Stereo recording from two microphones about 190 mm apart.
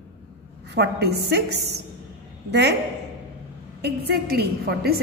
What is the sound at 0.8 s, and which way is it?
Speech, 60° right (ahead or behind).